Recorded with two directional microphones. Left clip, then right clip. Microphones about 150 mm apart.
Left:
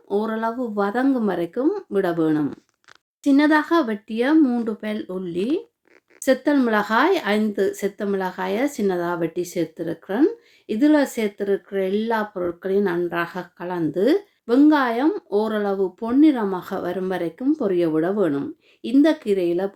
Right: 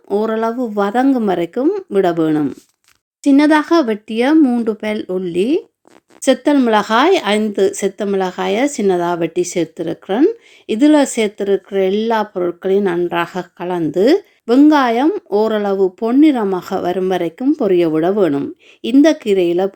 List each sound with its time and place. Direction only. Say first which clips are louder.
0.1 s speech: right 7 dB; 35° right (ahead or behind)